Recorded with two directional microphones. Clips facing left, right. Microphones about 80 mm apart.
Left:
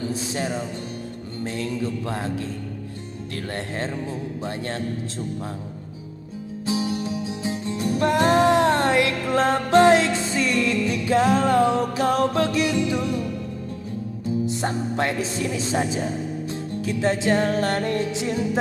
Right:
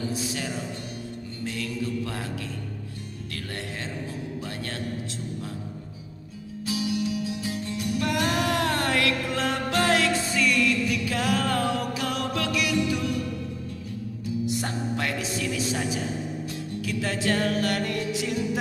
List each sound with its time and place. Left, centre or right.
0.1 s music: left
1.4 s speech: left
6.6 s music: left
14.2 s music: left